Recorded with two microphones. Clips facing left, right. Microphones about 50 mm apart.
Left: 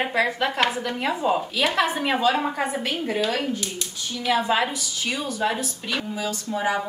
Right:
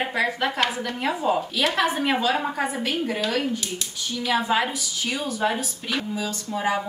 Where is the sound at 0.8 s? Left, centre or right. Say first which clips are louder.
Even; centre.